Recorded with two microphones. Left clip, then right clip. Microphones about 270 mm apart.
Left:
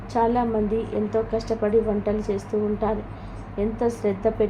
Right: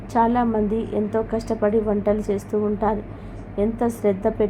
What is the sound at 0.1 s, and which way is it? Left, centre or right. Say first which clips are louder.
A woman's voice: right 2 dB; centre.